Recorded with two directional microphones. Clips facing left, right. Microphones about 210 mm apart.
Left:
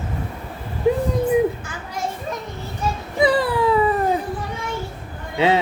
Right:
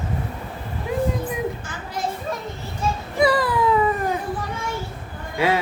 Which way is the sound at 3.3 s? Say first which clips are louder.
Left 2 dB; 30° left (ahead or behind).